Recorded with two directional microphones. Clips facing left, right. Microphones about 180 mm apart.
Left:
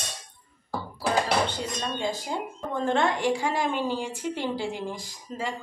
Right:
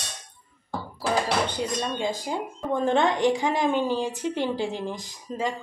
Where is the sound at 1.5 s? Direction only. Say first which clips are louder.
Right 4 dB; 15° right (ahead or behind).